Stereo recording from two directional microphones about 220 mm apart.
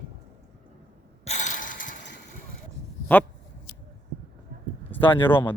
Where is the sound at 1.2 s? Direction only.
30° left (ahead or behind).